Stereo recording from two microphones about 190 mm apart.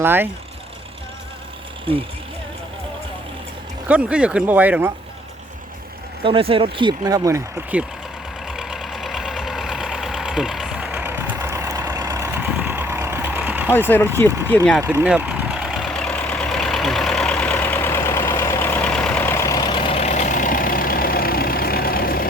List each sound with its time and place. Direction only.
0.0 s speech: 10° right (ahead or behind)
1.9 s speech: 30° right (ahead or behind)
3.8 s speech: 5° right (ahead or behind)
6.2 s speech: 30° right (ahead or behind); by 7.9 s 10° right (ahead or behind)
8.4 s vehicle: centre (ahead or behind)
13.7 s speech: 10° left (ahead or behind)
14.3 s speech: 15° right (ahead or behind)
14.5 s speech: 5° left (ahead or behind)
14.8 s vehicle: 10° right (ahead or behind); by 22.3 s 50° left (ahead or behind)